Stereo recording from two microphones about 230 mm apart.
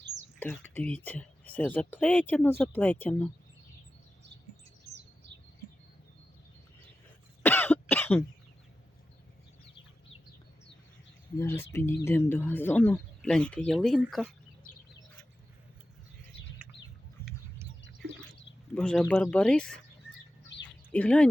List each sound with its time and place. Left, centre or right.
0.3 s speech: centre
7.4 s cough: centre
11.3 s speech: centre
18.7 s speech: centre
20.9 s speech: centre